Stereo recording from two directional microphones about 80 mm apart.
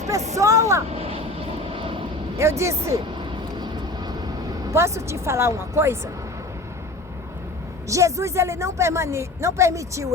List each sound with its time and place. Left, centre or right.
0.1 s a sound: right
2.4 s a woman's voice: right
3.2 s vehicle: right
4.7 s a woman's voice: right
7.9 s a woman's voice: right